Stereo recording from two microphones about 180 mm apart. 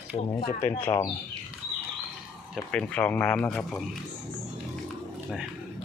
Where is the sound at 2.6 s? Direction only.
5° left (ahead or behind).